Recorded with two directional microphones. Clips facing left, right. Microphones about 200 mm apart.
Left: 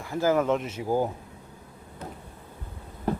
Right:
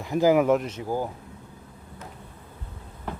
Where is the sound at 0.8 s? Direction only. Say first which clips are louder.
Left 3 dB; 15° left (ahead or behind).